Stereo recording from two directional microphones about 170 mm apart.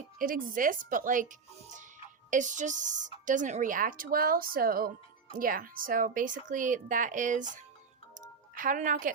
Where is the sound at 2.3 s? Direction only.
50° right (ahead or behind).